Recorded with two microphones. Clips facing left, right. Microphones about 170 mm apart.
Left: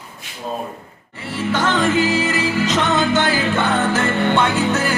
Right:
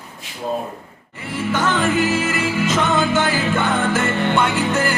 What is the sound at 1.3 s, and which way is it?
Music, 10° right (ahead or behind).